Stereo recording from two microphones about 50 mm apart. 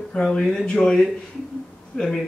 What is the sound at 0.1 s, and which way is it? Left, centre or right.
A man's voice, centre.